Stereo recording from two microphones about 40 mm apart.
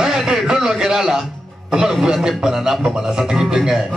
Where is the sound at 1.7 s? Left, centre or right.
Centre.